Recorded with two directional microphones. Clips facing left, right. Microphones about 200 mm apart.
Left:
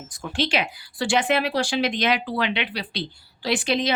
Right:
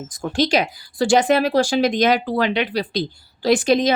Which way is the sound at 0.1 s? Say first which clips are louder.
Right 6 dB; 40° right (ahead or behind).